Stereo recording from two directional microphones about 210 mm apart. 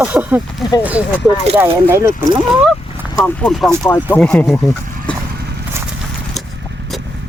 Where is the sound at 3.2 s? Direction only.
Centre (ahead or behind).